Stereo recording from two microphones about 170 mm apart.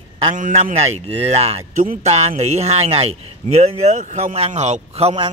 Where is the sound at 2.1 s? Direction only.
40° right (ahead or behind).